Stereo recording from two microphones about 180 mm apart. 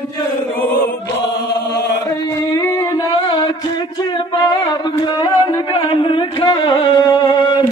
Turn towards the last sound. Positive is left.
turn(degrees=20)  # may be behind; listen again after turning